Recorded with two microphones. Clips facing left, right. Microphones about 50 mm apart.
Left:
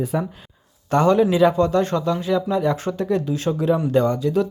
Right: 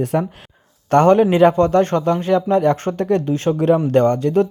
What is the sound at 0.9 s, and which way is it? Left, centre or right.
Speech, right.